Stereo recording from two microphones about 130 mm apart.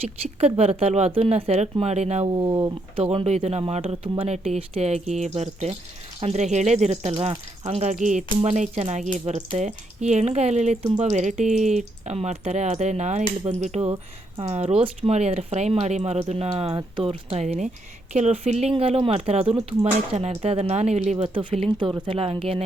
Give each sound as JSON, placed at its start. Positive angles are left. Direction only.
{"t": 0.3, "sound": "speech", "side_deg": -50}
{"t": 2.2, "sound": "speech", "side_deg": -35}
{"t": 3.0, "sound": "speech", "side_deg": -50}
{"t": 13.9, "sound": "speech", "side_deg": -40}
{"t": 14.5, "sound": "speech", "side_deg": -50}
{"t": 18.7, "sound": "speech", "side_deg": -45}
{"t": 21.3, "sound": "speech", "side_deg": -45}